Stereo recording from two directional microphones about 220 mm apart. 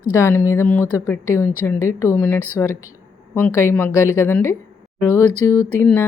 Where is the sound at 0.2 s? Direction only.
10° left (ahead or behind).